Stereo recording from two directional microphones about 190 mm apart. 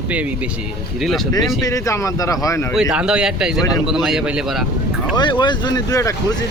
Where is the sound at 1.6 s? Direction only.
15° left (ahead or behind).